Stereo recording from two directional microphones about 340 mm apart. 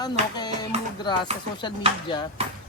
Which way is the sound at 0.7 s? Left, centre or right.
Centre.